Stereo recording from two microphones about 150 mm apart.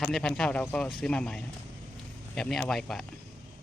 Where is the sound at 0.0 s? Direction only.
5° left (ahead or behind).